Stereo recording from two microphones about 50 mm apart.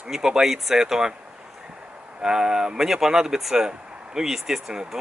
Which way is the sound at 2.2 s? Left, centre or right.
Centre.